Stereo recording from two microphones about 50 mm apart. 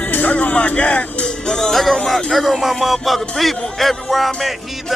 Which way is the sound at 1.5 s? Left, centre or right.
Centre.